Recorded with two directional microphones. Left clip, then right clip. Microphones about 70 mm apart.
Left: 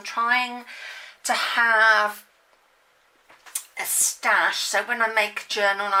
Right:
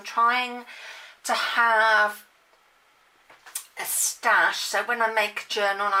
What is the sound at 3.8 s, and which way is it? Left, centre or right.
Speech, left.